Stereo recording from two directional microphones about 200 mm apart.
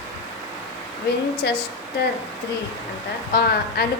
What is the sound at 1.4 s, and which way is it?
Speech, 55° left (ahead or behind).